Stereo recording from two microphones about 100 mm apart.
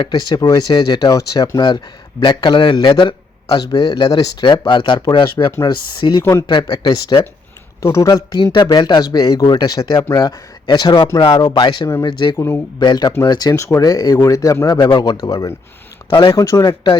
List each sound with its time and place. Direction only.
0.0 s a man's voice: 50° left (ahead or behind)
7.8 s speech: 30° left (ahead or behind)
8.1 s a man's voice: 45° left (ahead or behind); by 16.6 s 30° left (ahead or behind)
16.6 s a man's voice: 50° left (ahead or behind)